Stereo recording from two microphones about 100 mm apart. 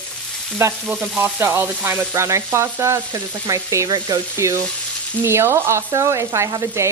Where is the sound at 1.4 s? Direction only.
25° right (ahead or behind).